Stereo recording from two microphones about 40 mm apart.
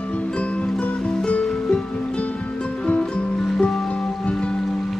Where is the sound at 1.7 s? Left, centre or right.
Left.